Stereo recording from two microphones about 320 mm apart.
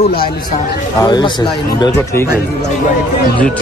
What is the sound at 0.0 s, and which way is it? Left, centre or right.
Speech, left.